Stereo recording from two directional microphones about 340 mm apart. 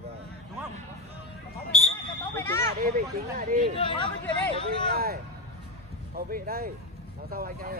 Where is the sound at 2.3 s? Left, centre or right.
Centre.